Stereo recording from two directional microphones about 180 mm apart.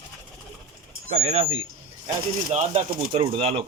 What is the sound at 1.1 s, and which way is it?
Speech, 35° right (ahead or behind).